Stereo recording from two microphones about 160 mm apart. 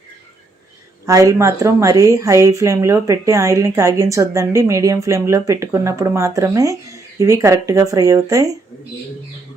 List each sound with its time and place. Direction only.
1.0 s speech: 20° right (ahead or behind)